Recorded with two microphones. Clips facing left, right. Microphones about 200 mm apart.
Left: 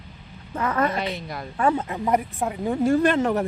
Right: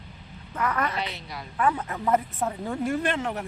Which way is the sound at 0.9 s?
50° left (ahead or behind).